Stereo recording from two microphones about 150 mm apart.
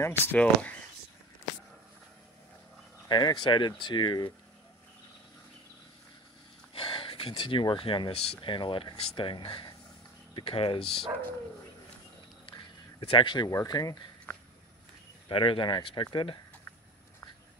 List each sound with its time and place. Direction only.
0.3 s speech: 10° left (ahead or behind)
3.1 s speech: 30° left (ahead or behind)
6.7 s speech: 35° left (ahead or behind)
13.1 s speech: 30° left (ahead or behind)
14.3 s a sound: 15° left (ahead or behind)
15.2 s speech: 35° left (ahead or behind)